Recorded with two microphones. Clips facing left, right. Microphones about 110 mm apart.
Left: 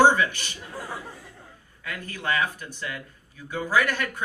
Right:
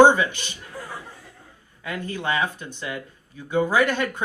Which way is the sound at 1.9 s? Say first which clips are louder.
Right 3 dB; 20° right (ahead or behind).